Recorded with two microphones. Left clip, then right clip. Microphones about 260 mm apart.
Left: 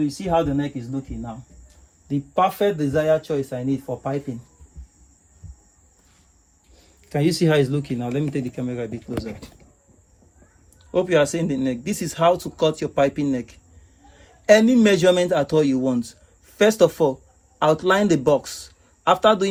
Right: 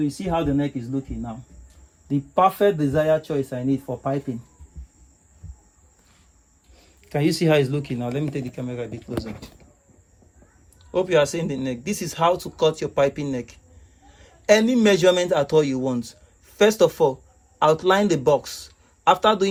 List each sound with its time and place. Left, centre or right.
0.2 s speech: centre
2.0 s speech: right
2.8 s speech: centre
6.7 s speech: right
10.9 s a man's voice: centre